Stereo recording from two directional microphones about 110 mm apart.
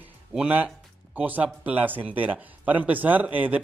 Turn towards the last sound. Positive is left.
turn(degrees=-15)  # may be behind; listen again after turning